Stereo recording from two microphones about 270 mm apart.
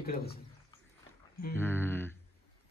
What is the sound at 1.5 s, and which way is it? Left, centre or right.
Speech, centre.